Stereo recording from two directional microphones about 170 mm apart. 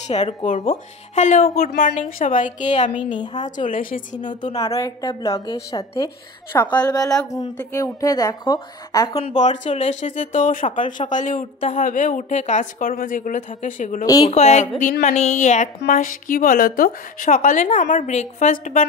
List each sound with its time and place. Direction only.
0.0 s speech: 40° left (ahead or behind)
4.2 s a woman's voice: 25° left (ahead or behind)
9.4 s speech: 45° left (ahead or behind)
14.0 s a woman's voice: 20° left (ahead or behind)
14.3 s a woman's voice: 40° left (ahead or behind)